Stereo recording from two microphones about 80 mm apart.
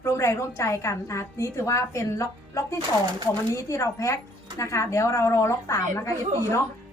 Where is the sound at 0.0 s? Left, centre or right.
Left.